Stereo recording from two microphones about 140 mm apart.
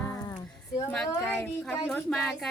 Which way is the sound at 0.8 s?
10° left (ahead or behind).